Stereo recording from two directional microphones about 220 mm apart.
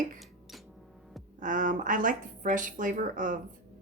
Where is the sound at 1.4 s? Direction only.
35° right (ahead or behind).